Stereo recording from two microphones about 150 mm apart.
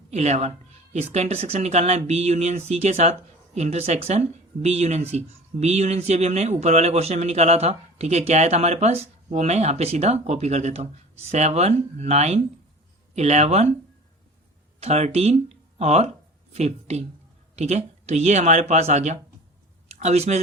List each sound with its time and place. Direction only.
0.1 s speech: 50° right (ahead or behind)
14.8 s speech: 45° right (ahead or behind)